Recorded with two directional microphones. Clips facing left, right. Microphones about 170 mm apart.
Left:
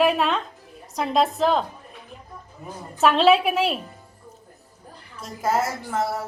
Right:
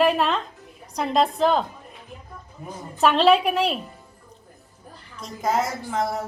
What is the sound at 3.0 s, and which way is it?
Speech, centre (ahead or behind).